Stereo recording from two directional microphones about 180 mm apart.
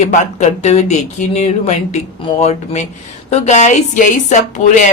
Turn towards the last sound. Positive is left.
turn(degrees=40)  # may be behind; listen again after turning